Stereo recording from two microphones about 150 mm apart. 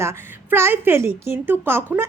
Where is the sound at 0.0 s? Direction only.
15° right (ahead or behind).